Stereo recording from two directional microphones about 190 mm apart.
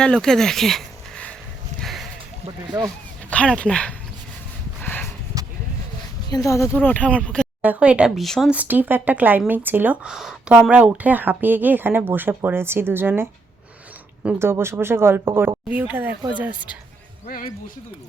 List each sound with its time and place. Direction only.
0.0 s speech: 5° left (ahead or behind)
1.8 s a sound: centre (ahead or behind)
2.6 s speech: 20° right (ahead or behind)
3.2 s speech: 5° left (ahead or behind)
4.8 s a sound: 10° left (ahead or behind)
6.3 s speech: 15° left (ahead or behind)
7.6 s speech: 5° right (ahead or behind)
14.3 s speech: 15° right (ahead or behind)
17.2 s speech: 50° left (ahead or behind)